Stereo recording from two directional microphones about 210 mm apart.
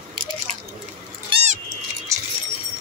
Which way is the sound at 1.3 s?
30° right (ahead or behind).